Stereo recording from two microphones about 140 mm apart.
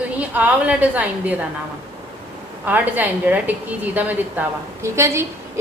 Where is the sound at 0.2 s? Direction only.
10° right (ahead or behind).